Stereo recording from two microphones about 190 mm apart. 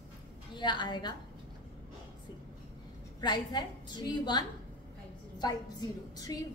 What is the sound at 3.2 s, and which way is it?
A woman's voice, 20° left (ahead or behind).